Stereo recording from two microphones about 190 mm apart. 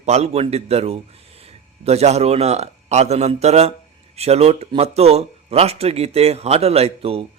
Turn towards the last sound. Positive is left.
turn(degrees=-30)  # may be behind; listen again after turning